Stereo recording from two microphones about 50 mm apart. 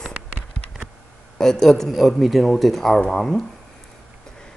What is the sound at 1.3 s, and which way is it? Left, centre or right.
Speech, centre.